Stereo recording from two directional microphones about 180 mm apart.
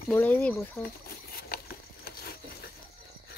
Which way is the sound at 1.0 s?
55° left (ahead or behind).